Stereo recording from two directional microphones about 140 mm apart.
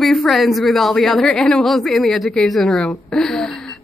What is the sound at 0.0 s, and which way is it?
A woman's voice, centre (ahead or behind).